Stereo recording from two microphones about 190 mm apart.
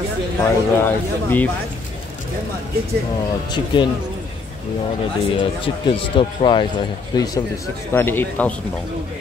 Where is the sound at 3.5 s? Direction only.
25° left (ahead or behind).